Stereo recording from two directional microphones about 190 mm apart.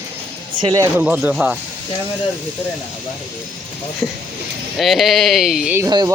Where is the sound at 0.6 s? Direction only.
20° right (ahead or behind).